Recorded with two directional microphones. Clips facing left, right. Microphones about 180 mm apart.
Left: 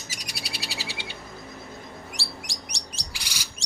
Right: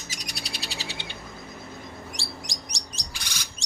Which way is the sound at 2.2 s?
10° left (ahead or behind).